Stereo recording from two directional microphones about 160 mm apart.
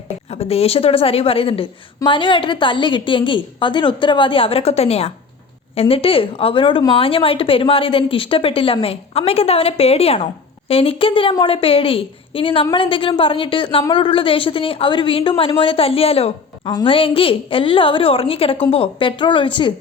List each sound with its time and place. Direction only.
0.3 s a woman's voice: 40° left (ahead or behind)